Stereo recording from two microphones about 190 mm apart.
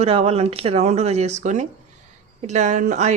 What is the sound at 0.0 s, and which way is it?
Speech, 30° right (ahead or behind).